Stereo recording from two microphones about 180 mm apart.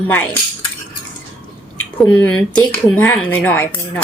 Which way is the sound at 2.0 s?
5° left (ahead or behind).